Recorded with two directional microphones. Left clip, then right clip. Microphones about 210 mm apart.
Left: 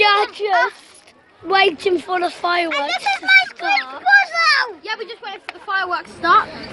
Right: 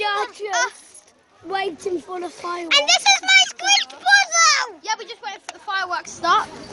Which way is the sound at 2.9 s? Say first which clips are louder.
Left 4 dB; 20° right (ahead or behind).